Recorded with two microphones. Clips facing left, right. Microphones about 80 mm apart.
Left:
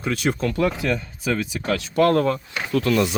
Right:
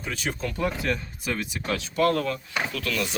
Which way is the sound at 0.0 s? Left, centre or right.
Left.